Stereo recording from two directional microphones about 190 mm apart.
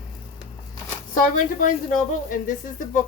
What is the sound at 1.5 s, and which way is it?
A woman's voice, 45° left (ahead or behind).